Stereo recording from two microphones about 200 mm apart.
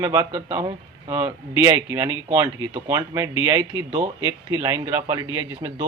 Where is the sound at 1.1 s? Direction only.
10° right (ahead or behind).